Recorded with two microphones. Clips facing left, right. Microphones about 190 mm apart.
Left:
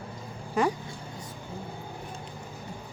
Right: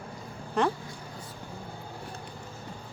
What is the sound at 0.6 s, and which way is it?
Speech, 10° left (ahead or behind).